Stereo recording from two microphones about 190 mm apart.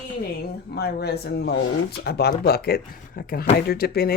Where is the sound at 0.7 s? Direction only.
55° left (ahead or behind).